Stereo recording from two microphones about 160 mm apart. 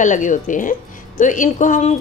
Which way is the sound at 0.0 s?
50° left (ahead or behind).